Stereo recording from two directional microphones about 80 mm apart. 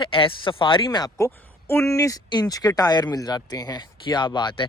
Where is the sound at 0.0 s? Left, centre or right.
Left.